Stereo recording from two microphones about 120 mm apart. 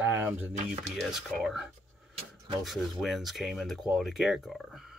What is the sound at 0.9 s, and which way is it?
Speech, centre (ahead or behind).